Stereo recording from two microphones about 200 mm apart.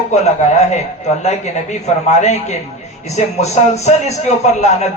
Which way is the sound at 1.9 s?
35° left (ahead or behind).